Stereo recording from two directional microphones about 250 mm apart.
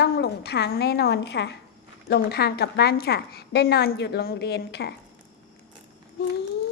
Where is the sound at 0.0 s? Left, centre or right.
Left.